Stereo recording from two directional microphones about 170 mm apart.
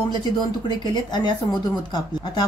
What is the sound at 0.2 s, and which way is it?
Speech, 25° left (ahead or behind).